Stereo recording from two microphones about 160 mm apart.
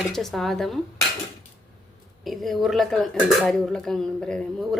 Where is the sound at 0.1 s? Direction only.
Centre (ahead or behind).